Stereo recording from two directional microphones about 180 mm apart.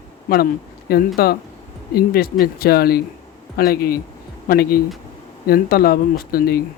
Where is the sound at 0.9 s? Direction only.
60° left (ahead or behind).